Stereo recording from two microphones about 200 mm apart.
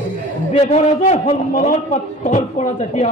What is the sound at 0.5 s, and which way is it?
A man's voice, 35° left (ahead or behind).